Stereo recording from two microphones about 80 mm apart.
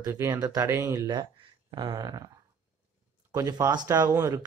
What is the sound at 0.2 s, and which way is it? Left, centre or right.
Speech, right.